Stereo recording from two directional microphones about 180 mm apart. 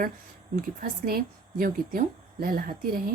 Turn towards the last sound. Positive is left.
turn(degrees=-55)  # may be behind; listen again after turning